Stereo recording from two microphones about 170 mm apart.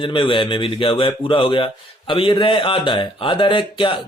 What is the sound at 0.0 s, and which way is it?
Speech, 30° left (ahead or behind).